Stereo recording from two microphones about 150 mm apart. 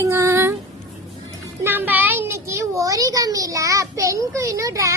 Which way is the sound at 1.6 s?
15° right (ahead or behind).